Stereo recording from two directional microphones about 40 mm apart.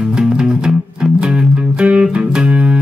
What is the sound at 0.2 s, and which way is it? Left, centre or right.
Music, centre.